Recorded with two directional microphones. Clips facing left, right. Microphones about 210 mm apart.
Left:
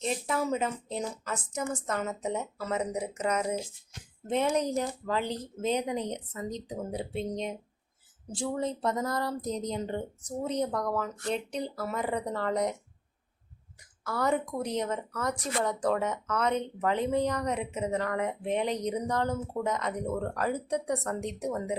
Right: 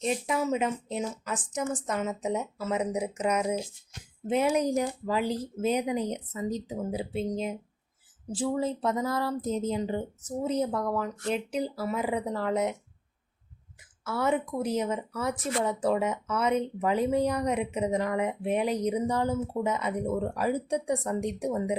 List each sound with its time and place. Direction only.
0.3 s speech: 10° right (ahead or behind)
8.3 s speech: centre (ahead or behind)
14.0 s speech: 5° right (ahead or behind)